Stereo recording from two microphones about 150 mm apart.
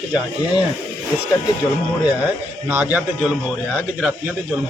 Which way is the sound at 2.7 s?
10° right (ahead or behind).